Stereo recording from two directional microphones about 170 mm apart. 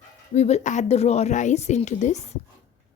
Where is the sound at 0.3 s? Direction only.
40° left (ahead or behind).